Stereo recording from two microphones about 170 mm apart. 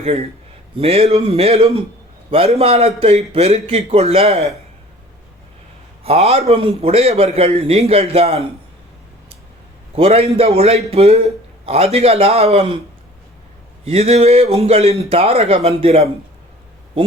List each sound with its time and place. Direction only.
0.0 s a man's voice: 35° right (ahead or behind)
6.0 s a man's voice: 35° right (ahead or behind)
9.9 s a man's voice: 35° right (ahead or behind)
13.8 s a man's voice: 35° right (ahead or behind)